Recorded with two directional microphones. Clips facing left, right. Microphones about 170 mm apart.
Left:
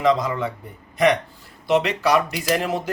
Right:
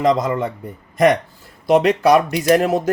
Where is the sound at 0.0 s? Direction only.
45° right (ahead or behind).